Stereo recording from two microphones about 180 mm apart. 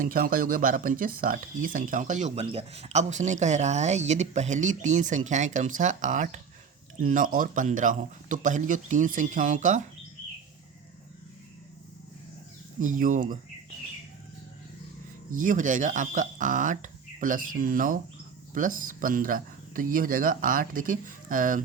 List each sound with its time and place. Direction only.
0.0 s speech: 55° right (ahead or behind)
12.8 s speech: 45° right (ahead or behind)
15.3 s speech: 45° right (ahead or behind)